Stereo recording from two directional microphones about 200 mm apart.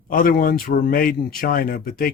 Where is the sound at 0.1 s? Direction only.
45° left (ahead or behind).